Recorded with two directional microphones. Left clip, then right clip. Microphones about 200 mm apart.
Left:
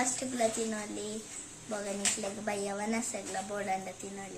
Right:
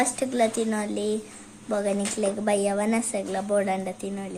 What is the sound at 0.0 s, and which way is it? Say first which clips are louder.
Speech: right 8 dB; 40° right (ahead or behind).